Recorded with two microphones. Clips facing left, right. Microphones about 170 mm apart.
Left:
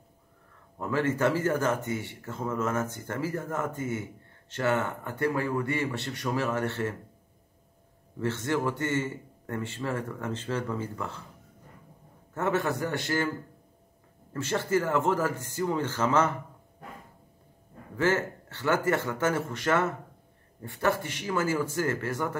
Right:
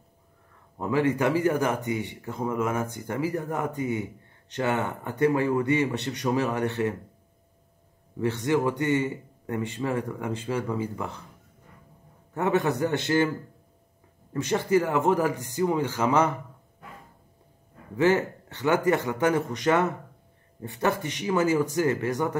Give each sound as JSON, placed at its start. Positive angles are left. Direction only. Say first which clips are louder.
{"t": 0.7, "sound": "a man's voice", "louder": "right 3 dB", "side_deg": -15}
{"t": 8.2, "sound": "a man's voice", "louder": "right 4 dB", "side_deg": -15}
{"t": 12.4, "sound": "a man's voice", "louder": "right 4 dB", "side_deg": -15}
{"t": 14.3, "sound": "a man's voice", "louder": "right 4 dB", "side_deg": -15}
{"t": 17.9, "sound": "a man's voice", "louder": "right 4 dB", "side_deg": -15}